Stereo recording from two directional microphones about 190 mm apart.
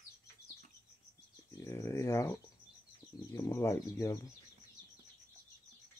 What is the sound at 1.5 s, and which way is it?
Speech, 15° left (ahead or behind).